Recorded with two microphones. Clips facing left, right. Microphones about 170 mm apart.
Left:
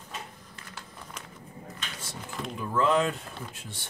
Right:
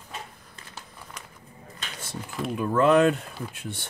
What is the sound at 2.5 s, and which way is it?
Speech, 60° right (ahead or behind).